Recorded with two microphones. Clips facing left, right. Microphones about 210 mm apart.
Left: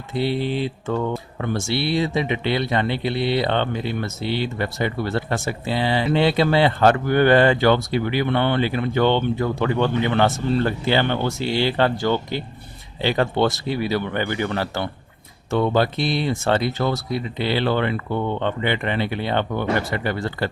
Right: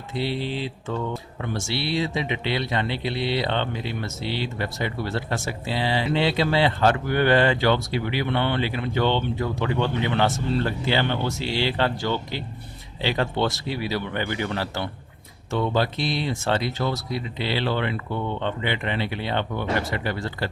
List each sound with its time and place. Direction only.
0.2 s speech: 55° left (ahead or behind)